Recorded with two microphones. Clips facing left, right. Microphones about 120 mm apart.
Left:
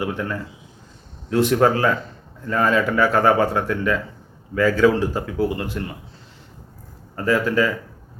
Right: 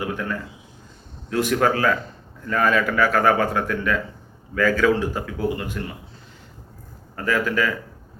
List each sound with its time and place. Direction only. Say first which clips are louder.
0.0 s speech: left 2 dB; 25° left (ahead or behind)
7.2 s speech: left 3 dB; 25° left (ahead or behind)